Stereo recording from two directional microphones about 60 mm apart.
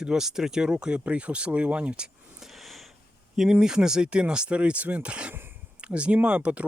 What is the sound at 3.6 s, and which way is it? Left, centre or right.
Speech, centre.